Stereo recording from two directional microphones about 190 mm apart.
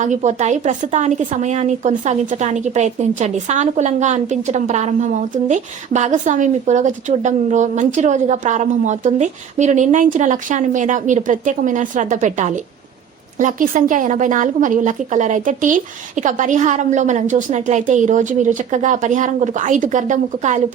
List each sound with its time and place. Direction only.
0.0 s speech: 40° right (ahead or behind)